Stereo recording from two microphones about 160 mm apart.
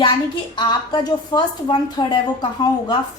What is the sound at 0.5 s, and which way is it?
A woman's voice, 25° left (ahead or behind).